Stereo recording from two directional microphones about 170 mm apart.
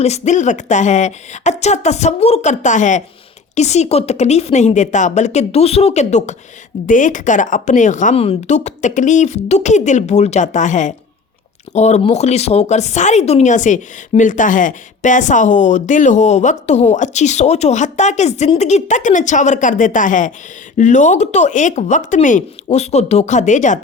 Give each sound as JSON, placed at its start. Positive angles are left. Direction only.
{"t": 0.0, "sound": "speech", "side_deg": 40}